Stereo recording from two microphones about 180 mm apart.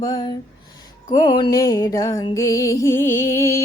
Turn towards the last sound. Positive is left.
turn(degrees=15)  # may be behind; listen again after turning